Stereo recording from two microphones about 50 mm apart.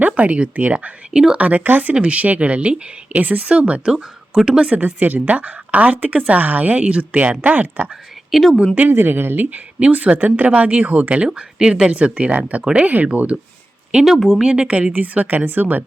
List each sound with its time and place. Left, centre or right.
0.0 s speech: right
1.1 s a woman's voice: centre
1.4 s speech: right
4.7 s speech: right
8.3 s speech: centre
8.9 s speech: right
9.8 s speech: right
14.2 s speech: centre
14.4 s a woman's voice: centre
14.9 s speech: right